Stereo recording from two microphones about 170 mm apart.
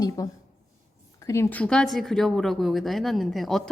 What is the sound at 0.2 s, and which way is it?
Speech, 20° left (ahead or behind).